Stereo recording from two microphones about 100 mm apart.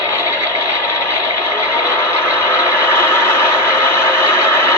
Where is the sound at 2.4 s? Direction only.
30° left (ahead or behind).